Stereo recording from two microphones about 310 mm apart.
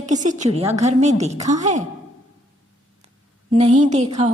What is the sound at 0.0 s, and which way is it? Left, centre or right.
A woman's voice, right.